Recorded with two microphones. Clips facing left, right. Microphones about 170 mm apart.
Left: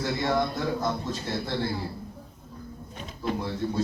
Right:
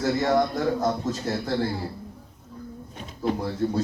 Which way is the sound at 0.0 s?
40° right (ahead or behind).